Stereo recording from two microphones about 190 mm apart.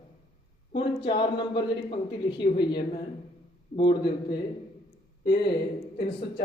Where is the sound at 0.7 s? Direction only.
25° left (ahead or behind).